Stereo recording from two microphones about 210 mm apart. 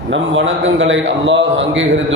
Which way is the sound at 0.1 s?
65° right (ahead or behind).